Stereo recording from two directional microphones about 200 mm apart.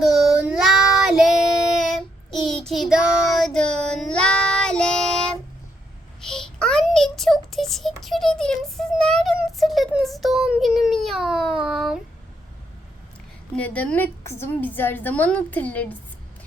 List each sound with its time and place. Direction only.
0.0 s child singing: centre (ahead or behind)
13.6 s a woman's voice: 5° left (ahead or behind)